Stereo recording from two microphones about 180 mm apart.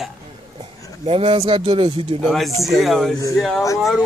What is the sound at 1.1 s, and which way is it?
Speech, 30° right (ahead or behind).